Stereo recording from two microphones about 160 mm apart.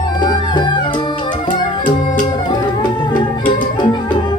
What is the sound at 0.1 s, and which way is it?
Music, 25° left (ahead or behind).